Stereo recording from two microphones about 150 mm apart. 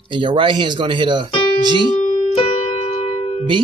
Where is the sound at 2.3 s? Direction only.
40° left (ahead or behind).